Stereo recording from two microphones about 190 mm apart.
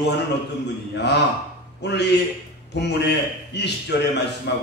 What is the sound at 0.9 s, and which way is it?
A man's voice, 65° left (ahead or behind).